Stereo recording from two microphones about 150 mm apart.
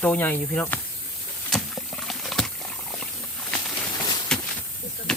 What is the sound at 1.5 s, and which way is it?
Wild animals, centre (ahead or behind).